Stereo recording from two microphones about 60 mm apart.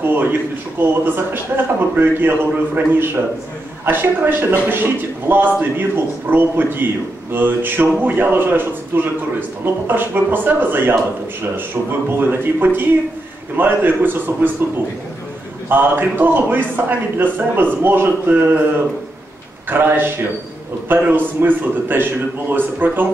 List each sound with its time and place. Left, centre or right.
0.0 s speech: right
15.7 s speech: right